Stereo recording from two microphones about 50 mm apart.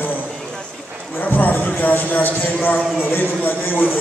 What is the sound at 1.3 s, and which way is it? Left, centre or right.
A man's voice, left.